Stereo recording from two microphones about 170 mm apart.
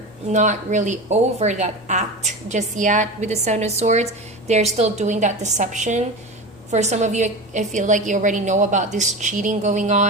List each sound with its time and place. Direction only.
0.3 s a woman's voice: 45° right (ahead or behind)